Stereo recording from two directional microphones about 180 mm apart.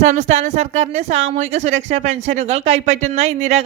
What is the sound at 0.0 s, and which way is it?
Speech, 40° right (ahead or behind).